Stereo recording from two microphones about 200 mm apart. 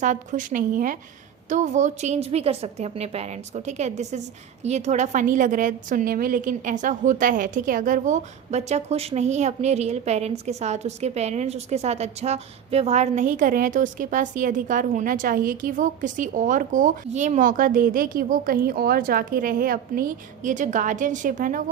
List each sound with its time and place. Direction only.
0.0 s a woman's voice: 40° right (ahead or behind)